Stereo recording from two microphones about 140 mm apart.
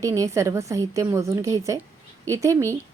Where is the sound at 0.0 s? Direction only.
25° right (ahead or behind).